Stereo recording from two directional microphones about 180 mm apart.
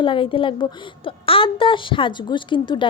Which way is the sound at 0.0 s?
30° left (ahead or behind).